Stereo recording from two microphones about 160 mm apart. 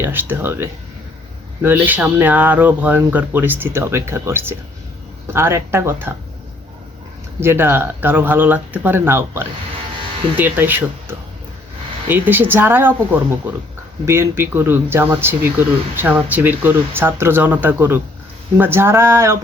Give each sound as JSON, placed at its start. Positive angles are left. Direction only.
{"t": 0.0, "sound": "speech", "side_deg": -15}
{"t": 7.3, "sound": "speech", "side_deg": -15}
{"t": 12.0, "sound": "speech", "side_deg": -10}